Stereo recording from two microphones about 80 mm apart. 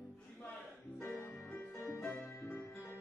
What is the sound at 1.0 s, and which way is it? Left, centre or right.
Music, left.